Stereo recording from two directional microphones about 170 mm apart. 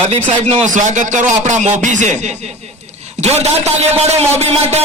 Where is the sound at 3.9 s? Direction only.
40° right (ahead or behind).